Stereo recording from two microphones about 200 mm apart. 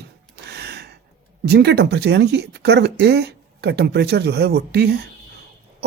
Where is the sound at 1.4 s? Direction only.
55° right (ahead or behind).